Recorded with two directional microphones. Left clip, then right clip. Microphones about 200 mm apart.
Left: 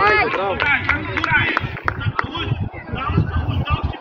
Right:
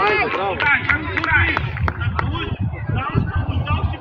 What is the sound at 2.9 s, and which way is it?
Vehicle, 55° left (ahead or behind).